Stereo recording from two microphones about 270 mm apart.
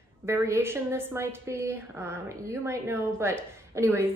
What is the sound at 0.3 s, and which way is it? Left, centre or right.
A woman's voice, centre.